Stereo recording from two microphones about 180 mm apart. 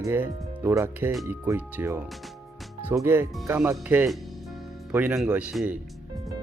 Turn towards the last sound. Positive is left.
turn(degrees=-5)  # may be behind; listen again after turning